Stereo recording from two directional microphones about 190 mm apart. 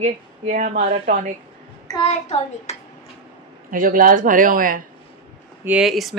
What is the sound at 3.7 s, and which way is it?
Speech, 45° right (ahead or behind).